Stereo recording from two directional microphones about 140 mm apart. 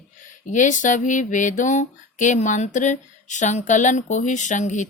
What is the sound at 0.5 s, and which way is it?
Speech, 65° left (ahead or behind).